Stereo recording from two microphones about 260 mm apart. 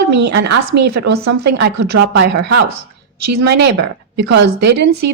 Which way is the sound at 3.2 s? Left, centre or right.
Right.